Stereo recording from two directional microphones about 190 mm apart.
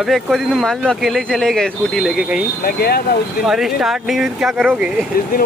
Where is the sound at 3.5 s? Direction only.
Centre (ahead or behind).